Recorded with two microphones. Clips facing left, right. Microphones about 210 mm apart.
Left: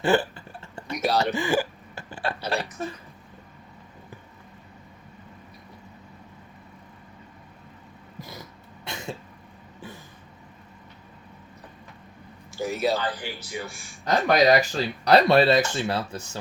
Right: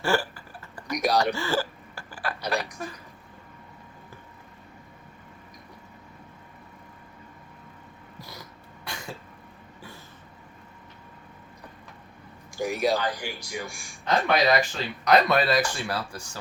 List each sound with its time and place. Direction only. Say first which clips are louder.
0.0 s a sound: left 4 dB; 20° left (ahead or behind)
0.9 s speech: even; 15° right (ahead or behind)
1.2 s a sound: left 2 dB; 15° left (ahead or behind)
2.5 s speech: right 1 dB; 30° left (ahead or behind)
8.8 s cough: left 3 dB; 25° left (ahead or behind)
12.5 s speech: even; 15° right (ahead or behind)
14.0 s speech: left 3 dB; 40° left (ahead or behind); by 16.4 s 25° left (ahead or behind)